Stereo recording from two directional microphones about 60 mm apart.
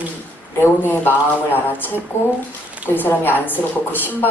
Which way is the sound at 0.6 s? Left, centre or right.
Left.